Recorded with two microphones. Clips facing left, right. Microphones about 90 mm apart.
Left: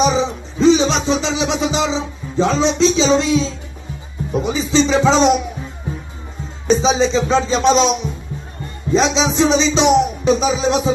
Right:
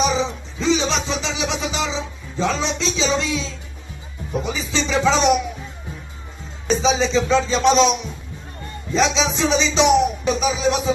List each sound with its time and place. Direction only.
0.0 s music: 20° left (ahead or behind)
6.8 s music: 25° left (ahead or behind)
8.9 s music: 20° left (ahead or behind)